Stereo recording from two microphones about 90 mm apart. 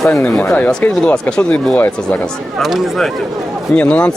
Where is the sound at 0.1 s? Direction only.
15° left (ahead or behind).